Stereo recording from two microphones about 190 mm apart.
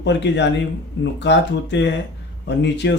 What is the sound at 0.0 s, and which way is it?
Speech, 65° left (ahead or behind).